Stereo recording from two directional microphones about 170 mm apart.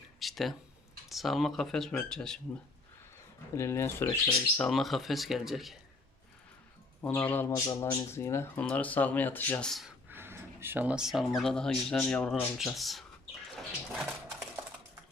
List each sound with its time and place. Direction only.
0.2 s a sound: centre (ahead or behind)
1.0 s speech: centre (ahead or behind)
3.5 s speech: 15° left (ahead or behind)
4.5 s speech: centre (ahead or behind)
7.0 s speech: 10° left (ahead or behind)
7.5 s speech: 20° left (ahead or behind); by 9.9 s centre (ahead or behind)
10.1 s speech: 15° right (ahead or behind)
13.6 s a sound: centre (ahead or behind)